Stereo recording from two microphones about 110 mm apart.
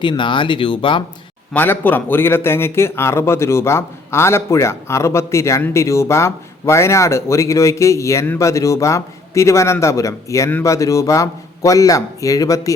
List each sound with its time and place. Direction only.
0.0 s speech: 45° left (ahead or behind)
1.5 s a man's voice: 15° left (ahead or behind)